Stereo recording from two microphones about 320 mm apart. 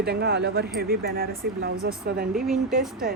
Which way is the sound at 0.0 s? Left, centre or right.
Right.